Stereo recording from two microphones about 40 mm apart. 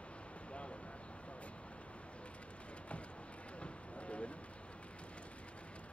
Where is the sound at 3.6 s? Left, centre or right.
Left.